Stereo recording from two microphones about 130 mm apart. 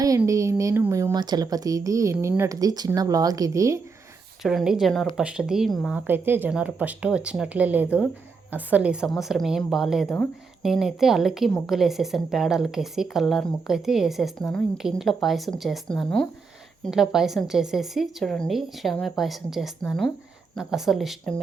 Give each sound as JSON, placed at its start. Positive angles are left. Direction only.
{"t": 0.3, "sound": "a sound", "side_deg": -25}
{"t": 2.4, "sound": "speech", "side_deg": -25}
{"t": 4.4, "sound": "a woman's voice", "side_deg": 0}
{"t": 6.1, "sound": "a woman's voice", "side_deg": -15}
{"t": 16.8, "sound": "a woman's voice", "side_deg": -5}